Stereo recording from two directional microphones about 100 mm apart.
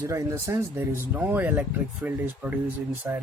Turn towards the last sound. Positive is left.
turn(degrees=-15)  # may be behind; listen again after turning